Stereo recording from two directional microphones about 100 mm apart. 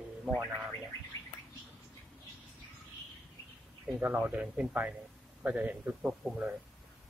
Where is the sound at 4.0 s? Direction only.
20° right (ahead or behind).